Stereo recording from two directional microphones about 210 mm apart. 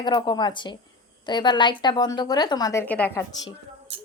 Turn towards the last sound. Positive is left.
turn(degrees=10)  # may be behind; listen again after turning